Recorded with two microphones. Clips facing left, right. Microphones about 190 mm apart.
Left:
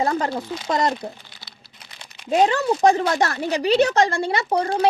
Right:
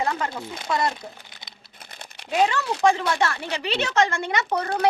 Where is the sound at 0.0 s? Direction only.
35° left (ahead or behind).